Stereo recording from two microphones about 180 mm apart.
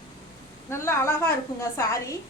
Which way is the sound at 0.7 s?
15° left (ahead or behind).